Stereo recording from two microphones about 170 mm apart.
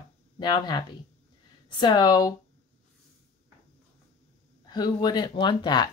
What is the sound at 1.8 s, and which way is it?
Speech, 25° left (ahead or behind).